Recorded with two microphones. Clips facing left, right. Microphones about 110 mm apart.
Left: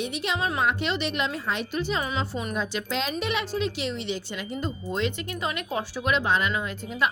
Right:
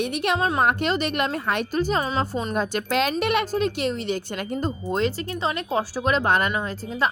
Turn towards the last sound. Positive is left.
turn(degrees=-30)  # may be behind; listen again after turning